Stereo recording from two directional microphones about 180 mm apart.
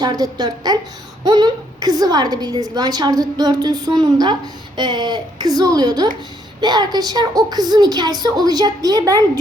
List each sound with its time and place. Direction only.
0.0 s a woman's voice: 20° right (ahead or behind)